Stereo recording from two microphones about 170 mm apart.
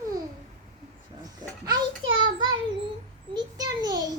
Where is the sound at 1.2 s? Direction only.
20° right (ahead or behind).